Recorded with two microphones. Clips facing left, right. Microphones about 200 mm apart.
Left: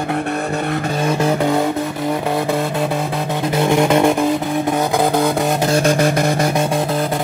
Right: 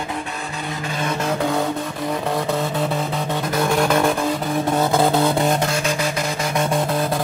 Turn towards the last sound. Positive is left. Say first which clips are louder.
# left 8 dB
turn(degrees=55)  # may be behind; listen again after turning